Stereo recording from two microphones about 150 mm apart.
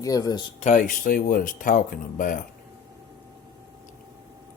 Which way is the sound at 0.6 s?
60° left (ahead or behind).